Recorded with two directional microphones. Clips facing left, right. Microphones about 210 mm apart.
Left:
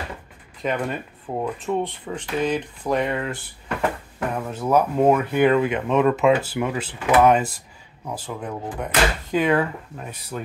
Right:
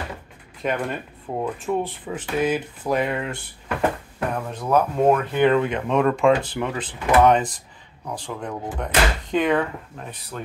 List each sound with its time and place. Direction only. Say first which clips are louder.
0.6 s speech: even; centre (ahead or behind)
4.4 s speech: left 1 dB; 5° left (ahead or behind)